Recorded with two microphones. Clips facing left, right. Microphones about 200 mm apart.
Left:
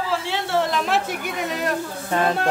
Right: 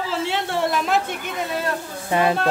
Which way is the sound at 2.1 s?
10° right (ahead or behind).